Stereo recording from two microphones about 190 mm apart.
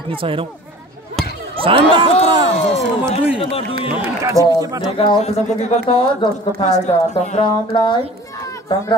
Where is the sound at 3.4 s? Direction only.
30° left (ahead or behind).